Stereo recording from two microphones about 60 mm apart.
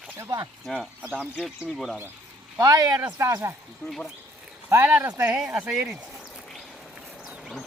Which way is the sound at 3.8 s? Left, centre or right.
Centre.